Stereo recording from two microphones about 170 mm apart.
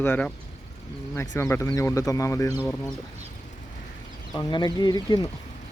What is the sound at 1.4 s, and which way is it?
Speech, 15° left (ahead or behind).